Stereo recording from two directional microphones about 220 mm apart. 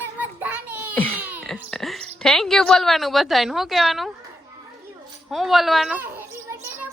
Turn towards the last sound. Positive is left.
turn(degrees=-10)  # may be behind; listen again after turning